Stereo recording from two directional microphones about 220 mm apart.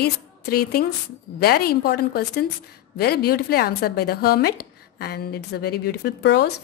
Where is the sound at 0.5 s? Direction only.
45° left (ahead or behind).